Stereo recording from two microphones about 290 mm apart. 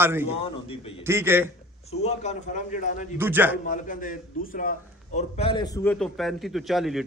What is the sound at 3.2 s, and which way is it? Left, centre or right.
Speech, centre.